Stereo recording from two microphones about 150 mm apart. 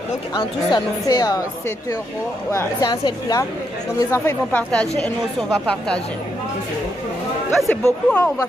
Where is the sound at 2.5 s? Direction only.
25° left (ahead or behind); by 6.0 s 5° left (ahead or behind).